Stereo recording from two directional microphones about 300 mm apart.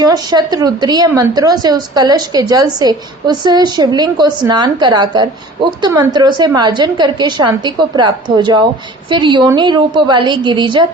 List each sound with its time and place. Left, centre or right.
0.0 s a woman's voice: centre